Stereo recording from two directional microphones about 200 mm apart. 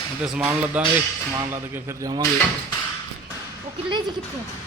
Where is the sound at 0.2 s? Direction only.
5° right (ahead or behind).